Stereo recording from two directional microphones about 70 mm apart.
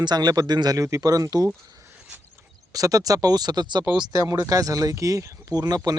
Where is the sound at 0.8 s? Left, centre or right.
Right.